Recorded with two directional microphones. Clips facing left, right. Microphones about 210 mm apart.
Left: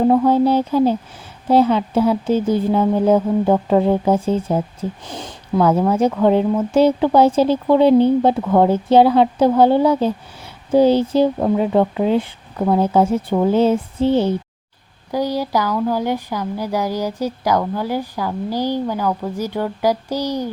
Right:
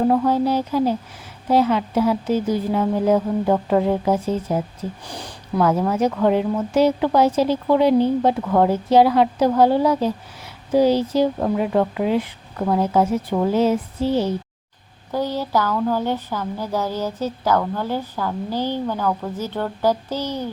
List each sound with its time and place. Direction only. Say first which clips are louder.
0.1 s a woman's voice: left 4 dB; 25° left (ahead or behind)
12.5 s speech: left 3 dB; 20° left (ahead or behind)
12.8 s a woman's voice: left 3 dB; 30° left (ahead or behind)
15.1 s speech: left 2 dB; 10° left (ahead or behind)